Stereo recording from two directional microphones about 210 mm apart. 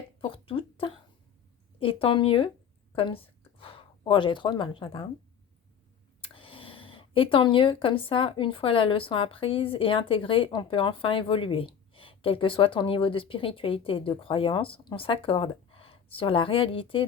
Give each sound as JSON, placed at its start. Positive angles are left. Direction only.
{"t": 0.2, "sound": "a sound", "side_deg": 25}
{"t": 1.8, "sound": "speech", "side_deg": 25}
{"t": 6.2, "sound": "speech", "side_deg": 25}